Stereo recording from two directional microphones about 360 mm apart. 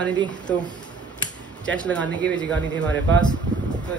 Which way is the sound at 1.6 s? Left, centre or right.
Centre.